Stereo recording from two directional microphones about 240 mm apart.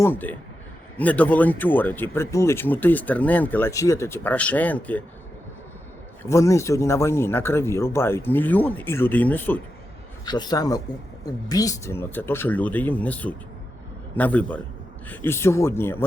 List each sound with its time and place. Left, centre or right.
0.0 s speech: centre
6.2 s speech: centre